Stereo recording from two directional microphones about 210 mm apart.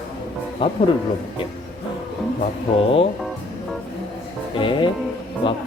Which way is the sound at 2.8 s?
25° left (ahead or behind).